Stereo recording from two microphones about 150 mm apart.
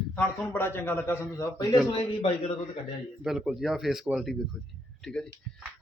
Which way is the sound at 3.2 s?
Centre (ahead or behind).